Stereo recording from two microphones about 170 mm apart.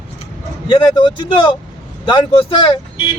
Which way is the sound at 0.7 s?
30° left (ahead or behind).